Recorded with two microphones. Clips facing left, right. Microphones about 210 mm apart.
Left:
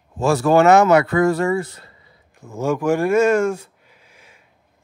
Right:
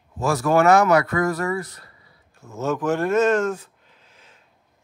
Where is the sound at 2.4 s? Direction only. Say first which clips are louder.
Left 3 dB; 15° left (ahead or behind).